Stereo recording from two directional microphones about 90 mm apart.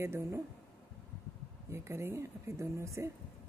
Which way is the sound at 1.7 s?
30° right (ahead or behind).